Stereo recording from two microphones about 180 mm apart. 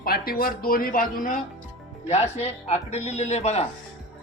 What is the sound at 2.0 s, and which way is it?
Speech, 35° left (ahead or behind).